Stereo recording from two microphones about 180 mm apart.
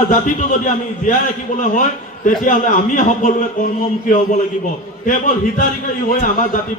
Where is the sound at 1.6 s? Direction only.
45° left (ahead or behind).